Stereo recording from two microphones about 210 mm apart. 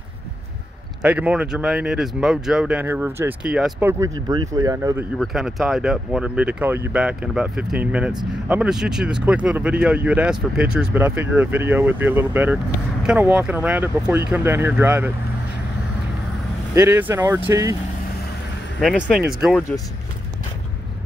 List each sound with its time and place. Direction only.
1.0 s speech: 5° right (ahead or behind)
5.2 s speech: centre (ahead or behind)
16.7 s speech: 10° right (ahead or behind)
18.8 s speech: centre (ahead or behind)